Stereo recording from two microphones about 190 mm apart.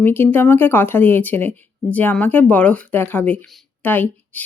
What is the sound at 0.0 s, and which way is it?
Speech, 10° left (ahead or behind).